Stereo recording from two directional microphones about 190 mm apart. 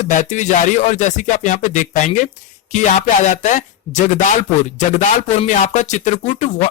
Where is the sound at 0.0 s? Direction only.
40° left (ahead or behind).